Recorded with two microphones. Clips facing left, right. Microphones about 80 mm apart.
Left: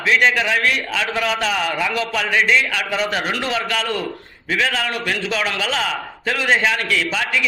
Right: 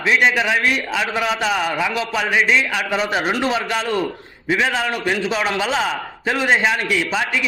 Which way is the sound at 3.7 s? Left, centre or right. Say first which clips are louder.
Right 2 dB; centre.